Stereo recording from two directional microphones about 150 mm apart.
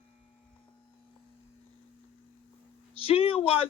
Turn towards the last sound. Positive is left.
turn(degrees=40)  # may be behind; listen again after turning